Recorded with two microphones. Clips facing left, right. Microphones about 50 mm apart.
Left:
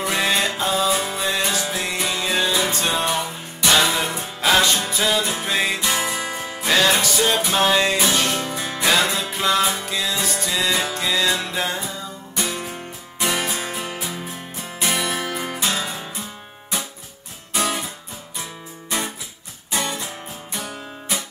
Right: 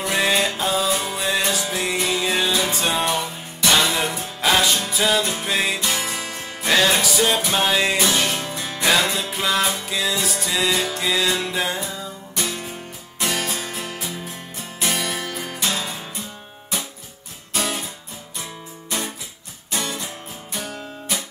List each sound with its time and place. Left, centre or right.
0.0 s music: centre
6.7 s music: centre
19.7 s music: centre